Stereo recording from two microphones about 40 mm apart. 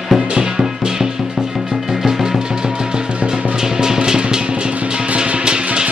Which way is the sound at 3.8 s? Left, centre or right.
Centre.